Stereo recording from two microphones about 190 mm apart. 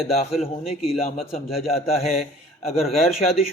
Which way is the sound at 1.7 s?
35° left (ahead or behind).